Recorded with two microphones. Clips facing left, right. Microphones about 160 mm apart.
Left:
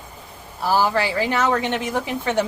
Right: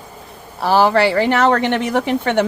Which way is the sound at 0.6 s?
80° right.